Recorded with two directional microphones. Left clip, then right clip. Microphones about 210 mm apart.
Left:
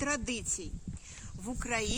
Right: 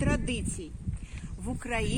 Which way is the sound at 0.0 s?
30° left (ahead or behind).